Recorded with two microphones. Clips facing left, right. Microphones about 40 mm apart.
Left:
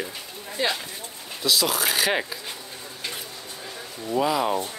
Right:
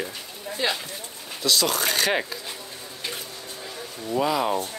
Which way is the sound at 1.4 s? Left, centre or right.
Centre.